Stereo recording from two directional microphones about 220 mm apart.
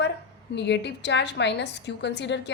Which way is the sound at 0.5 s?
50° left (ahead or behind).